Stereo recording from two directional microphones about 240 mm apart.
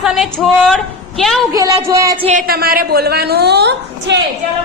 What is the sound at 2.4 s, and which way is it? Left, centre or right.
A woman's voice, right.